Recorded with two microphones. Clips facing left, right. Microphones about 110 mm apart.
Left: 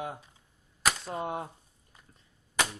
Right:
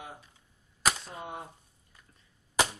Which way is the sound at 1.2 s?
55° left (ahead or behind).